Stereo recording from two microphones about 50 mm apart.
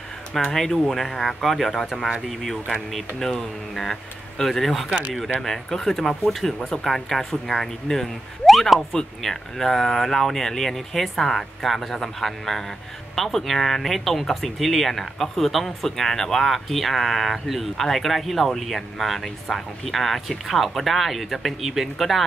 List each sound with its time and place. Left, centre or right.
0.3 s speech: centre
4.8 s speech: right
5.4 s speech: centre